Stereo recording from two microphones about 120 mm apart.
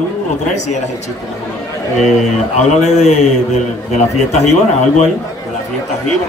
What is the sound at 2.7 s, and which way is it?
Speech, 70° left (ahead or behind).